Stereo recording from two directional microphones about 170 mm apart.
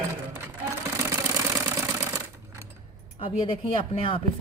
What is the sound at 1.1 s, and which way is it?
Engine, 20° right (ahead or behind).